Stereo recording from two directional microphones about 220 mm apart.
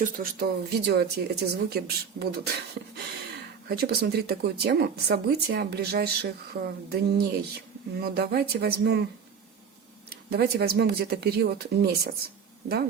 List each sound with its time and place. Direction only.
0.0 s speech: 45° right (ahead or behind)
3.7 s speech: 45° right (ahead or behind)
10.1 s speech: 45° right (ahead or behind)